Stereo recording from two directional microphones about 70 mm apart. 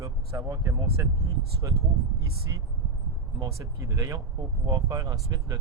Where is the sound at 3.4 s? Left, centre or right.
Right.